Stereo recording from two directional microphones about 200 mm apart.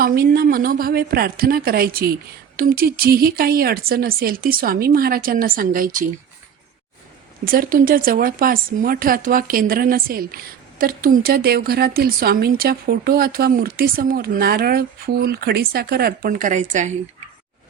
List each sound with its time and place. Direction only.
0.0 s speech: 50° right (ahead or behind)
7.4 s speech: 45° right (ahead or behind)